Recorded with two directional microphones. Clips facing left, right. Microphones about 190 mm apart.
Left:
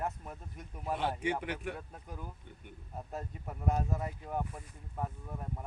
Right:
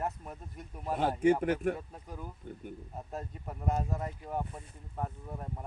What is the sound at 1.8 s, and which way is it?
Speech, 5° right (ahead or behind).